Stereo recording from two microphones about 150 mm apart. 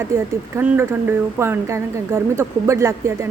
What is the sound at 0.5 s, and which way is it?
A woman's voice, 15° right (ahead or behind).